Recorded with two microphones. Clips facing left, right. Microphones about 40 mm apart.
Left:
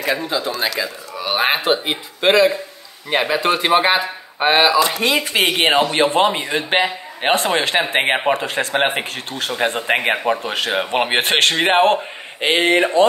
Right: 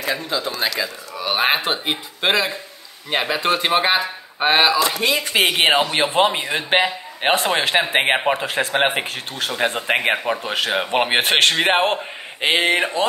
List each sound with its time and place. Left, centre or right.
0.0 s speech: centre
0.4 s speech: centre